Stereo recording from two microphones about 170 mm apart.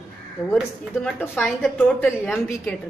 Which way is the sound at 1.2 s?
10° left (ahead or behind).